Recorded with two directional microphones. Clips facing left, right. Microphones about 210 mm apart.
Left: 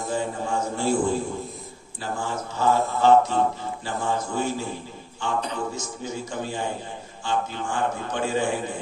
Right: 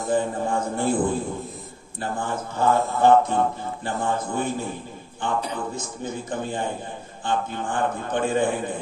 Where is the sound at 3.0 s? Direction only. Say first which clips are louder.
Even; 55° right (ahead or behind).